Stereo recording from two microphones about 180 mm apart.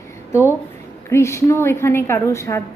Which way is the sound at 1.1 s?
15° left (ahead or behind).